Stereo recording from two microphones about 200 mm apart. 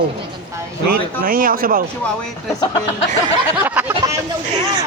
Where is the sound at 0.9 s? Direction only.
45° right (ahead or behind).